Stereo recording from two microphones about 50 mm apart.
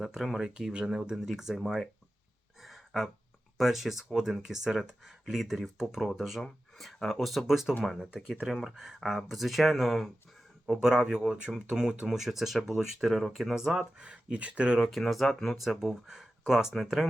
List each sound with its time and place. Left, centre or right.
0.0 s speech: centre
2.6 s a sound: centre
3.6 s speech: centre
10.8 s speech: centre
12.1 s speech: centre
14.0 s speech: centre
14.8 s speech: centre